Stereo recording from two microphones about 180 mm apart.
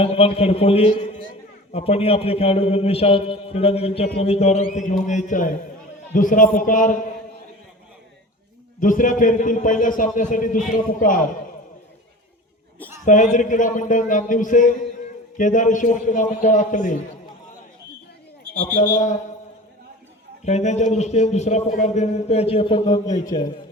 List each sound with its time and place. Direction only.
0.0 s a man's voice: 35° left (ahead or behind)
8.8 s a man's voice: 45° left (ahead or behind)
13.1 s a man's voice: 45° left (ahead or behind)
18.5 s a man's voice: 45° left (ahead or behind)
20.4 s a man's voice: 40° left (ahead or behind); by 23.5 s 20° left (ahead or behind)